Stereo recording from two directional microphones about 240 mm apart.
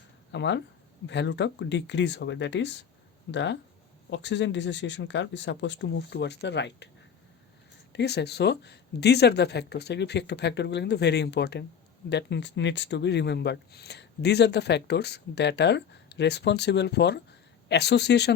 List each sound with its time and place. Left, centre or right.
0.3 s speech: left
7.9 s speech: left